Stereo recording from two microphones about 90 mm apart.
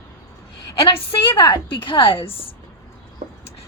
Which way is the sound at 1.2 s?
60° left (ahead or behind).